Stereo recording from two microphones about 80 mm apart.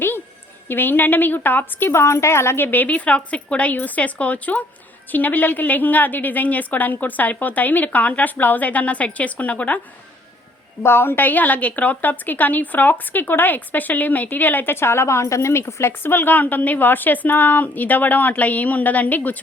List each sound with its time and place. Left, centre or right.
0.7 s a woman's voice: left
10.8 s a woman's voice: left